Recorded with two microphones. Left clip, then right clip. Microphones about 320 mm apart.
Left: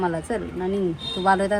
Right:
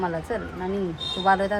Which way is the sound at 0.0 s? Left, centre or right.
Left.